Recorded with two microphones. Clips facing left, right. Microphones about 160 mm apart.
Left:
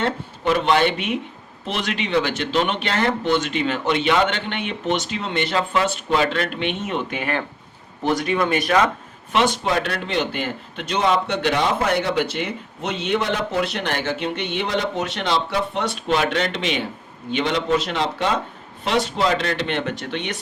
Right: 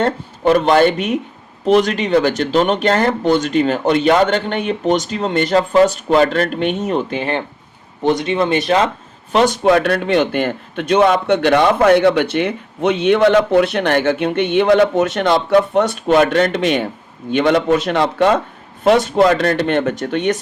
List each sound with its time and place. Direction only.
0.0 s speech: 45° right (ahead or behind); by 8.9 s 25° right (ahead or behind)
9.3 s a man's voice: 40° right (ahead or behind)